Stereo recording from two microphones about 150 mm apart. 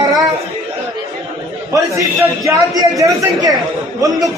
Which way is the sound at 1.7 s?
20° right (ahead or behind).